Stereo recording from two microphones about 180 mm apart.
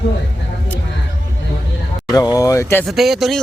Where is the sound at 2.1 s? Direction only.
20° left (ahead or behind).